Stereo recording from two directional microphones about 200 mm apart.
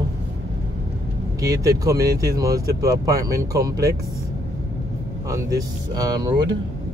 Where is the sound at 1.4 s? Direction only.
15° right (ahead or behind).